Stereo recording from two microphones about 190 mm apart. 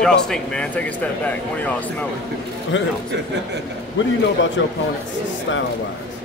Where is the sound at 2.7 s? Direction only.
80° left.